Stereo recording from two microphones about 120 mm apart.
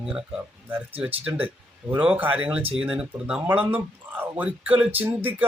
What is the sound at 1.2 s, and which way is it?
Speech, 15° right (ahead or behind).